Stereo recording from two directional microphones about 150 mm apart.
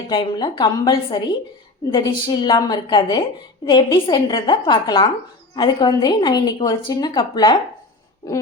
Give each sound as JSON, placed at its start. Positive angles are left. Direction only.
{"t": 0.1, "sound": "a woman's voice", "side_deg": 30}